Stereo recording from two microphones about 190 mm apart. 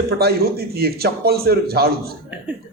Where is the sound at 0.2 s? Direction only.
55° right (ahead or behind).